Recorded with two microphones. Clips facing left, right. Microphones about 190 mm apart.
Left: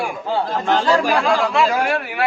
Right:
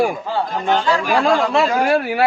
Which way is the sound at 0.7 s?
40° left (ahead or behind).